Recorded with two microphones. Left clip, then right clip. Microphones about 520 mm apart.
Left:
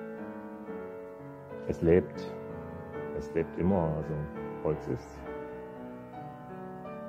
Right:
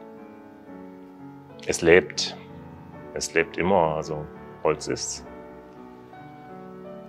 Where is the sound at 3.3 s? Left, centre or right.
Centre.